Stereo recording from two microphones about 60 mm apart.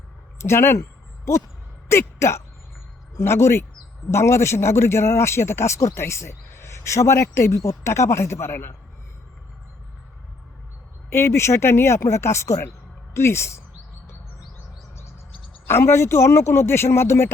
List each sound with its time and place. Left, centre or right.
0.3 s speech: left
0.8 s a sound: left
1.9 s a man's voice: left
11.1 s a man's voice: left
15.6 s a man's voice: left